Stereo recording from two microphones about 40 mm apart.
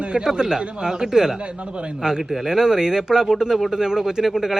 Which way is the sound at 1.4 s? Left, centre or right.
Right.